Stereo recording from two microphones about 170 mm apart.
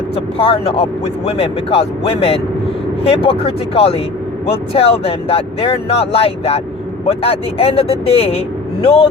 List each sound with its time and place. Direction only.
0.3 s speech: 35° left (ahead or behind)